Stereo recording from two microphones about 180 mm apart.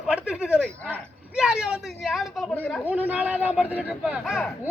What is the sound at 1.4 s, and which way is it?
Speech, 5° right (ahead or behind).